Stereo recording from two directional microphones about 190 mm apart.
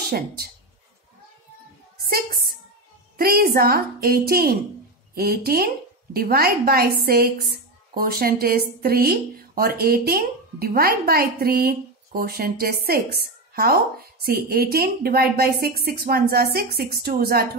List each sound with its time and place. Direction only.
0.0 s speech: 55° right (ahead or behind)
2.0 s a sound: 55° right (ahead or behind)
3.2 s speech: 55° right (ahead or behind)